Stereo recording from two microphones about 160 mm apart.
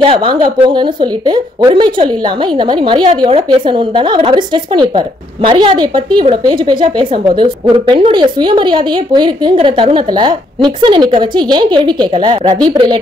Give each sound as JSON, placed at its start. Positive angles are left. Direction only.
{"t": 0.0, "sound": "a woman's voice", "side_deg": -30}